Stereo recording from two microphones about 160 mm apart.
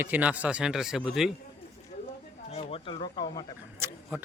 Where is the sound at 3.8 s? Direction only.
15° right (ahead or behind).